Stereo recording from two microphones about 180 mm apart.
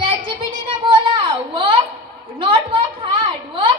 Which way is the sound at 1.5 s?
30° right (ahead or behind).